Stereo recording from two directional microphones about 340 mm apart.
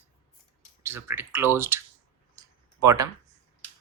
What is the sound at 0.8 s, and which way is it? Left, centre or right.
Speech, centre.